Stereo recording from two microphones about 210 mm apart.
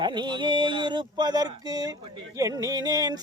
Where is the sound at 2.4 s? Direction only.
15° right (ahead or behind).